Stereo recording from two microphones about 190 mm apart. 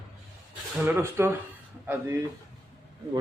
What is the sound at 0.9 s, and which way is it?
Speech, 10° right (ahead or behind).